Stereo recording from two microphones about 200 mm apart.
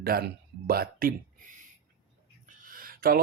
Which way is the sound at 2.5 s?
45° right (ahead or behind).